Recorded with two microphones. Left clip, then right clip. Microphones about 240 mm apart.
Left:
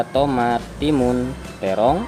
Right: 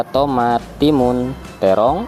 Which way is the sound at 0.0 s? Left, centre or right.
Right.